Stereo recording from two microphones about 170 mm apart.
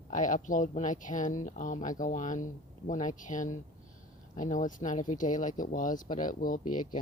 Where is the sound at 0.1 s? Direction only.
45° left (ahead or behind).